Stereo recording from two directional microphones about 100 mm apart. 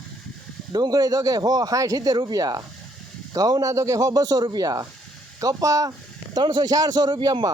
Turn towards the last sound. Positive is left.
turn(degrees=-50)  # may be behind; listen again after turning